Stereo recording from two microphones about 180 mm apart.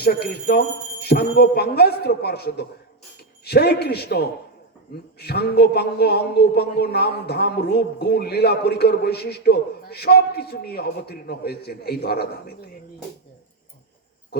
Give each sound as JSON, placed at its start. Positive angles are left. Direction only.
{"t": 0.0, "sound": "a man's voice", "side_deg": 60}